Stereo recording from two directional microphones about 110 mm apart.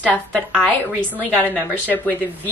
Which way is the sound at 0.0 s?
10° left (ahead or behind).